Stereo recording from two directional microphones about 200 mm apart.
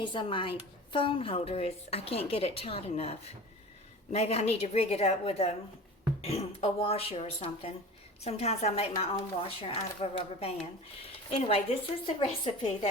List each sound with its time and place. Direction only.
0.0 s a woman's voice: 25° left (ahead or behind)